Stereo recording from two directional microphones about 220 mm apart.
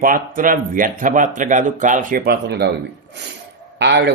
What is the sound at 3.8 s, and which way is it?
Speech, 50° right (ahead or behind).